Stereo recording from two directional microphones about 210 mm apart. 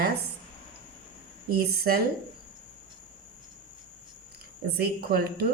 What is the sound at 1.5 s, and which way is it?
Speech, 45° right (ahead or behind).